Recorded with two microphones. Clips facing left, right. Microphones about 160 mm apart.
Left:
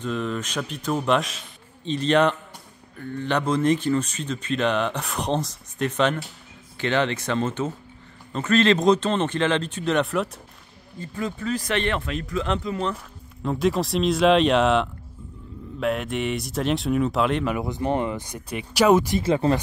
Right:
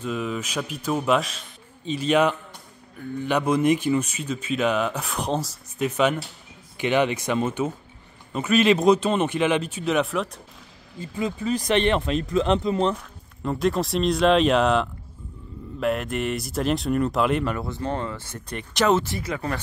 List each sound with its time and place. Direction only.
0.0 s speech: 5° right (ahead or behind)
11.0 s speech: 15° right (ahead or behind)
12.9 s speech: centre (ahead or behind)
17.6 s speech: 15° left (ahead or behind)
19.2 s speech: 30° left (ahead or behind)